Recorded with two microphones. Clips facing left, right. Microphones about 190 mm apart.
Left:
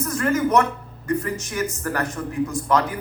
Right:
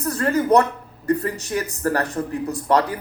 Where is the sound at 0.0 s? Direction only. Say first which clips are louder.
Even; 35° right (ahead or behind).